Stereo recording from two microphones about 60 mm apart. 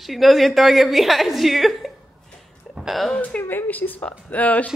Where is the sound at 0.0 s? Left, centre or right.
Centre.